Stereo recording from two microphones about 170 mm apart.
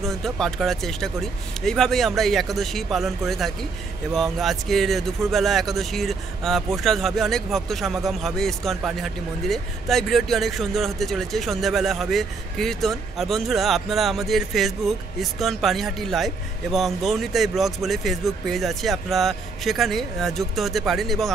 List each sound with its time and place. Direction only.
0.0 s speech: centre (ahead or behind)